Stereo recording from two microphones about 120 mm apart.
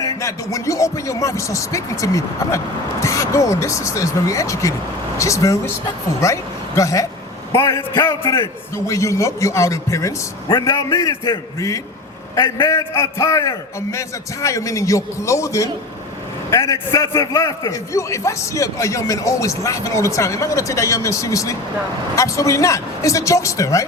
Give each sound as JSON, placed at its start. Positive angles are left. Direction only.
{"t": 0.0, "sound": "a man's voice", "side_deg": 25}